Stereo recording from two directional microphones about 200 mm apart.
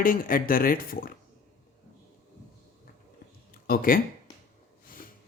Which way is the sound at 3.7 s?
45° left (ahead or behind).